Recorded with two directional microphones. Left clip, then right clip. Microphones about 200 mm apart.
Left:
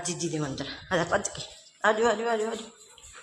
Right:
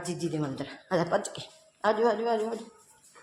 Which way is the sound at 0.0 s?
Centre (ahead or behind).